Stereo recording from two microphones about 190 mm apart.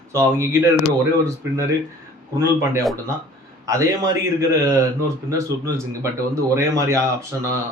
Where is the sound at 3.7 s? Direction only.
15° right (ahead or behind).